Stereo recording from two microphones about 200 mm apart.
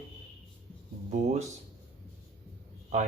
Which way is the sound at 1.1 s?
35° right (ahead or behind).